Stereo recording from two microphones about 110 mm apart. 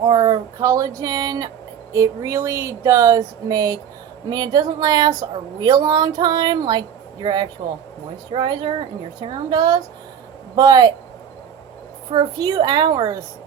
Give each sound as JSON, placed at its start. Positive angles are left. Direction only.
{"t": 0.0, "sound": "speech", "side_deg": -40}
{"t": 12.1, "sound": "speech", "side_deg": -40}